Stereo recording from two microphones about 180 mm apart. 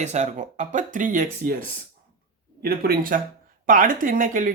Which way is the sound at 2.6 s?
55° right (ahead or behind).